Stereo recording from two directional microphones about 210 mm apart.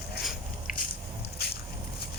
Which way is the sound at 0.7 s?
40° left (ahead or behind).